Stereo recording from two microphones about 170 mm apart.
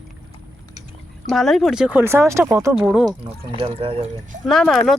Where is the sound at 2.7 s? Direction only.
5° right (ahead or behind).